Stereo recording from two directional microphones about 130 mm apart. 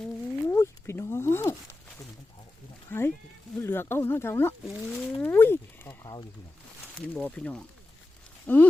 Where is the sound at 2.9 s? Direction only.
20° left (ahead or behind).